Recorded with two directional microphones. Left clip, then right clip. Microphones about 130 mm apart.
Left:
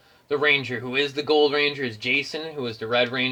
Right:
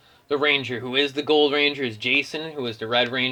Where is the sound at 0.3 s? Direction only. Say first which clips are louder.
Even; 50° right (ahead or behind).